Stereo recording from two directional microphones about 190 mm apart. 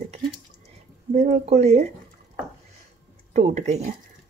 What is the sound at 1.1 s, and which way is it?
Speech, 35° right (ahead or behind).